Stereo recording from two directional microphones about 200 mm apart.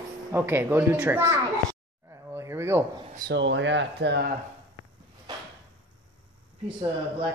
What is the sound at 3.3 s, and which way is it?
Speech, 65° right (ahead or behind).